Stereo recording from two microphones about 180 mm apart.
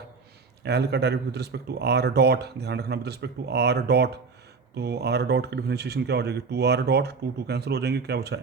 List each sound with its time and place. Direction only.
0.6 s speech: 65° right (ahead or behind)